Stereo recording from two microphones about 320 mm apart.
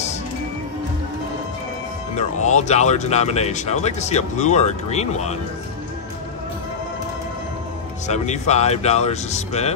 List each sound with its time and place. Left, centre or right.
2.4 s speech: left
8.1 s speech: left